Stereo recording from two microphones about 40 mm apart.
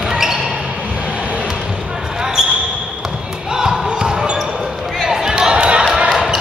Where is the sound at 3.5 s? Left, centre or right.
Centre.